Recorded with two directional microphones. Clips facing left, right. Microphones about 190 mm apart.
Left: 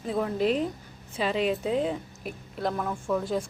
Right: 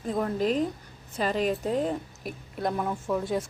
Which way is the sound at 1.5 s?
Centre (ahead or behind).